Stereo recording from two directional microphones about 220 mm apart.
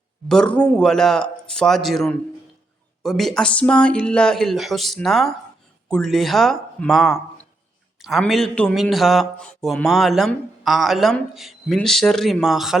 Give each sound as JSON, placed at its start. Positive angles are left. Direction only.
{"t": 0.3, "sound": "speech", "side_deg": 5}